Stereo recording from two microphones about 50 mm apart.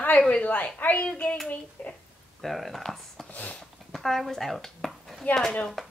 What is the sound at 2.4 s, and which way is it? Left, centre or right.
Speech, centre.